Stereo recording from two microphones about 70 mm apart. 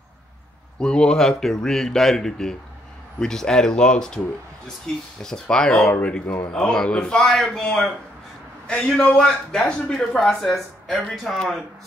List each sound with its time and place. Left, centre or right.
0.7 s a man's voice: centre
5.9 s speech: centre
6.5 s a man's voice: centre
9.1 s a man's voice: centre